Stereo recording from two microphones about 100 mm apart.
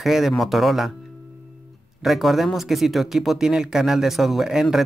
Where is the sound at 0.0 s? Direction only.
Centre (ahead or behind).